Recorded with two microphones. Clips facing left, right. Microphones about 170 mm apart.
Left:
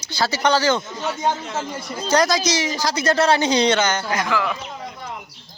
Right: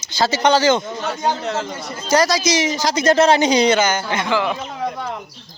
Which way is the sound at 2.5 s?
20° right (ahead or behind).